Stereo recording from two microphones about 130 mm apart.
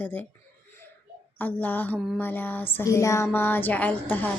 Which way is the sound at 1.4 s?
10° left (ahead or behind).